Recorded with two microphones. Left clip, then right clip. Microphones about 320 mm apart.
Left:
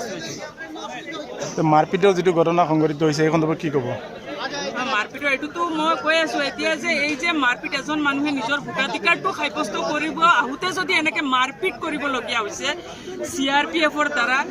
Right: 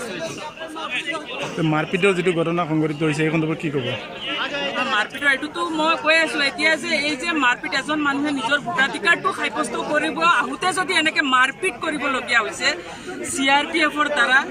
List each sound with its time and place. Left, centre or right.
1.7 s a man's voice: left
4.9 s speech: centre